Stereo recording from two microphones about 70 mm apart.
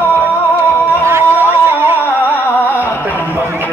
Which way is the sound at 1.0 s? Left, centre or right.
Right.